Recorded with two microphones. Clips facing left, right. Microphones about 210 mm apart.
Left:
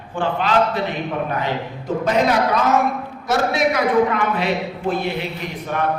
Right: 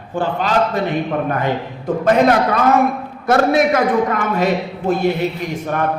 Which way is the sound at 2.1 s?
55° right (ahead or behind).